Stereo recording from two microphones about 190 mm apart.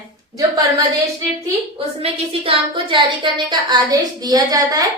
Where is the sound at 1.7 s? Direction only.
30° right (ahead or behind).